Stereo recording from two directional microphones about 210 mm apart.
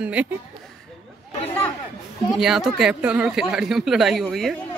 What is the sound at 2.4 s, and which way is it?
Speech, centre (ahead or behind).